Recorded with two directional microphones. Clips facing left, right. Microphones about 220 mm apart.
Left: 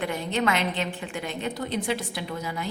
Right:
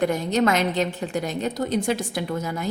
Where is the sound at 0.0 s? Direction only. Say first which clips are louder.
Right 6 dB; 40° right (ahead or behind).